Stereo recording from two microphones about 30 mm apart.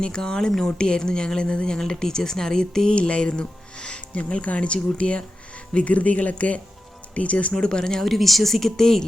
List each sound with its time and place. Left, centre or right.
0.0 s speech: left
2.9 s speech: left
4.1 s speech: left
7.5 s speech: left
8.0 s speech: centre